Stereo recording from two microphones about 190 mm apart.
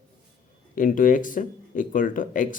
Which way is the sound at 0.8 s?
45° left (ahead or behind).